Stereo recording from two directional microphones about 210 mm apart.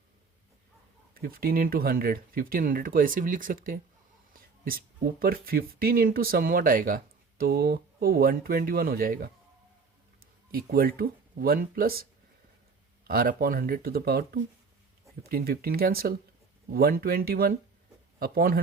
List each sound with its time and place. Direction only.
1.1 s speech: 45° right (ahead or behind)
10.5 s speech: 45° right (ahead or behind)
13.1 s speech: 45° right (ahead or behind)